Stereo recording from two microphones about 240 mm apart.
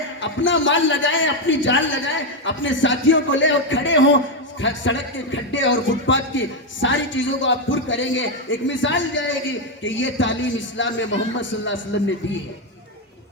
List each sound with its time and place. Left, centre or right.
0.2 s a man's voice: left